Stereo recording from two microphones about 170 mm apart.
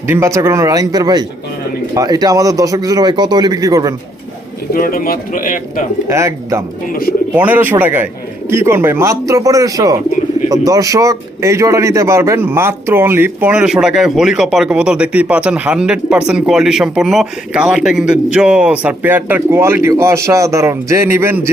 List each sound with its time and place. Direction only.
0.1 s speech: 15° right (ahead or behind)
4.7 s speech: 55° left (ahead or behind)
6.1 s a man's voice: 15° right (ahead or behind)